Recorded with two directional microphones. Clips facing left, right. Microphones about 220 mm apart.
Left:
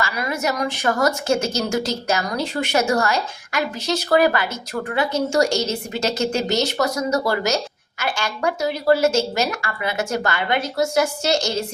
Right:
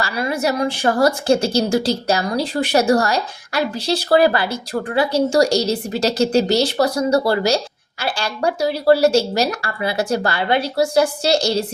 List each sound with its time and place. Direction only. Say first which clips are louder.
0.0 s a woman's voice: right 3 dB; 30° right (ahead or behind)